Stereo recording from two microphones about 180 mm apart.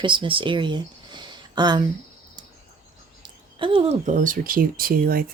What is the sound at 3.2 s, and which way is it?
Speech, 30° right (ahead or behind).